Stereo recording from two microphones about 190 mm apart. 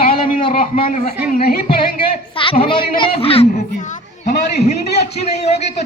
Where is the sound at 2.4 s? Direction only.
25° left (ahead or behind).